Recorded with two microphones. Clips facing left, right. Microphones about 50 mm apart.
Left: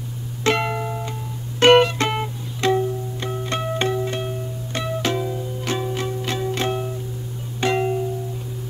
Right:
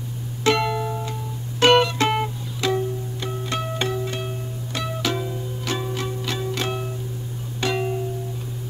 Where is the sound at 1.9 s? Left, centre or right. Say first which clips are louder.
Right 2 dB; centre.